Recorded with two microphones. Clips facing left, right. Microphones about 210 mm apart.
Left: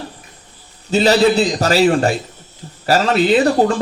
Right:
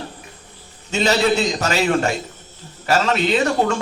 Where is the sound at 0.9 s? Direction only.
35° left (ahead or behind).